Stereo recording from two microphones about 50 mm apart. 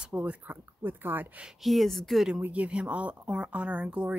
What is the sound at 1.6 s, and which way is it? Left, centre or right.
Speech, centre.